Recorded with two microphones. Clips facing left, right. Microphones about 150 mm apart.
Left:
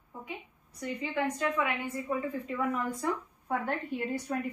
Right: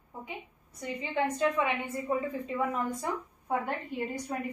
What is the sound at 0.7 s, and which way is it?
A woman's voice, 25° right (ahead or behind).